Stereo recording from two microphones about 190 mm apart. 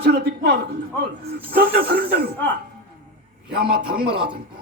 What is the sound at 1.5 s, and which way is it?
Speech, 55° right (ahead or behind).